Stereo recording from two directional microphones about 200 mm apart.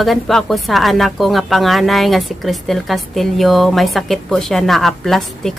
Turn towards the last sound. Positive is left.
turn(degrees=0)  # may be behind; listen again after turning